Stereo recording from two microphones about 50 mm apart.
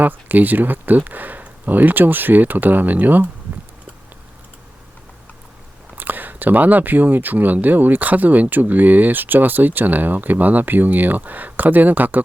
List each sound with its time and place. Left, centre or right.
0.0 s speech: right
6.0 s speech: right